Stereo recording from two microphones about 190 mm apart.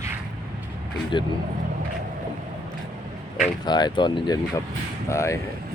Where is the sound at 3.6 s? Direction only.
20° left (ahead or behind).